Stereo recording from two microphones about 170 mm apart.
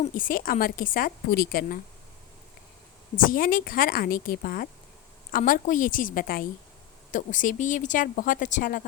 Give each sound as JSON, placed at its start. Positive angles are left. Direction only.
{"t": 0.0, "sound": "a woman's voice", "side_deg": 55}
{"t": 3.2, "sound": "a woman's voice", "side_deg": 55}